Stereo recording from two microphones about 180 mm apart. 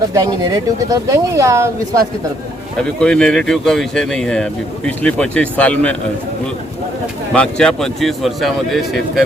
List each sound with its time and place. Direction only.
0.1 s speech: 20° right (ahead or behind)
2.8 s speech: 5° left (ahead or behind)
7.3 s speech: 5° left (ahead or behind)